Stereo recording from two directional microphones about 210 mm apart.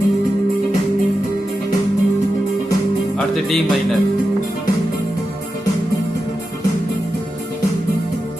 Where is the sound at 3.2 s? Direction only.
Centre (ahead or behind).